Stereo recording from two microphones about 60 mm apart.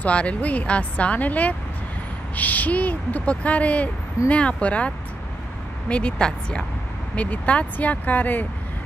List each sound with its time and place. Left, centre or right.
0.0 s a woman's voice: left